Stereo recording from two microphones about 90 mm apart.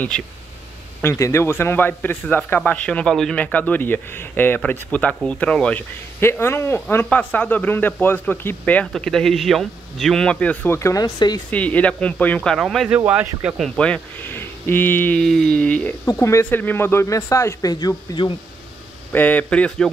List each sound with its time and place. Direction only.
1.0 s speech: 30° left (ahead or behind); by 5.9 s 15° left (ahead or behind)
6.1 s speech: 25° left (ahead or behind)
8.9 s speech: 5° left (ahead or behind)
10.7 s speech: 35° left (ahead or behind)
11.1 s speech: 50° left (ahead or behind)
11.5 s speech: 15° left (ahead or behind)
12.5 s speech: centre (ahead or behind)
12.9 s speech: 15° right (ahead or behind)
13.7 s speech: 10° left (ahead or behind)
14.3 s a sound: 25° left (ahead or behind)
15.1 s speech: 5° left (ahead or behind)
16.1 s speech: 35° left (ahead or behind)
16.4 s speech: 20° left (ahead or behind); by 18.2 s 45° left (ahead or behind)
19.1 s speech: 20° left (ahead or behind)